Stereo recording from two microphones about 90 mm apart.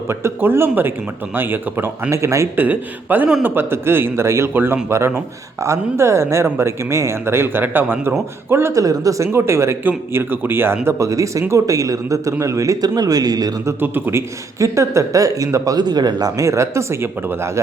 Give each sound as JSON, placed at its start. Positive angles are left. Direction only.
{"t": 0.1, "sound": "speech", "side_deg": -30}
{"t": 2.6, "sound": "speech", "side_deg": -20}
{"t": 8.8, "sound": "a man's voice", "side_deg": -40}
{"t": 13.7, "sound": "a man's voice", "side_deg": -20}